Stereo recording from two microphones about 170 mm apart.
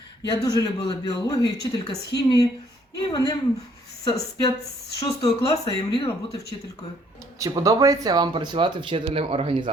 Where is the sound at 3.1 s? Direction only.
20° left (ahead or behind).